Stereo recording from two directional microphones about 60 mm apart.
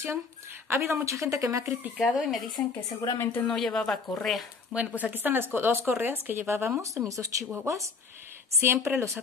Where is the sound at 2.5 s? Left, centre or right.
Left.